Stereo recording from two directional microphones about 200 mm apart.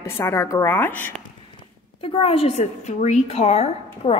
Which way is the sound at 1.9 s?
30° left (ahead or behind).